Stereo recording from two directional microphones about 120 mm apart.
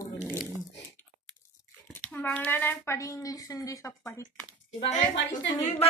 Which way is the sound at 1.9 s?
10° left (ahead or behind).